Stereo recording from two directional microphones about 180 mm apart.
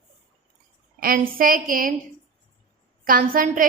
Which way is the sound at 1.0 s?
55° right (ahead or behind).